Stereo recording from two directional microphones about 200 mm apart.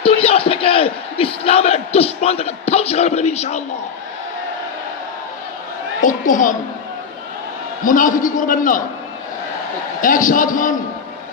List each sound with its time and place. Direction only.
0.0 s crowd: 30° left (ahead or behind)
6.0 s a woman's voice: 40° left (ahead or behind)
7.9 s a man's voice: 40° left (ahead or behind)
10.0 s a man's voice: 40° left (ahead or behind)